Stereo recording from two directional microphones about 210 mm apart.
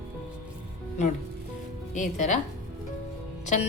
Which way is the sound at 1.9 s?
35° left (ahead or behind).